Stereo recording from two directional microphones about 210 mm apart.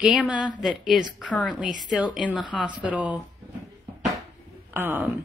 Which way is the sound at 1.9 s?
5° right (ahead or behind).